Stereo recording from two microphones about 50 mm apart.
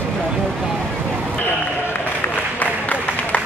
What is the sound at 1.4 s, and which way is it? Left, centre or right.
Run, left.